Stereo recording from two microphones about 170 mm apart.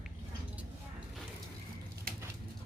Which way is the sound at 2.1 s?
60° right (ahead or behind).